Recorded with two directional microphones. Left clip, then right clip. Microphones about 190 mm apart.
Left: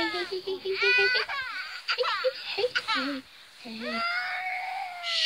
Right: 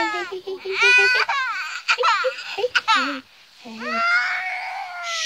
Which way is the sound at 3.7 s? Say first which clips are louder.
Right 10 dB; 55° right (ahead or behind).